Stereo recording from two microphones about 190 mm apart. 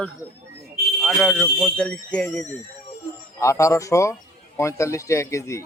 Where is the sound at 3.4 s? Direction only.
15° left (ahead or behind).